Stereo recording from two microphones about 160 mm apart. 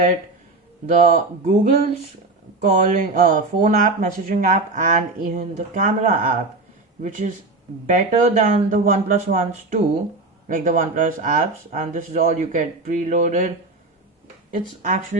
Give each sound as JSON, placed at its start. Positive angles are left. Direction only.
{"t": 1.0, "sound": "speech", "side_deg": -45}
{"t": 14.5, "sound": "speech", "side_deg": -55}